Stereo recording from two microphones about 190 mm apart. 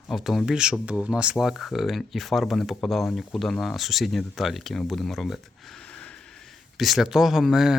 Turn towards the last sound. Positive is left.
turn(degrees=0)  # may be behind; listen again after turning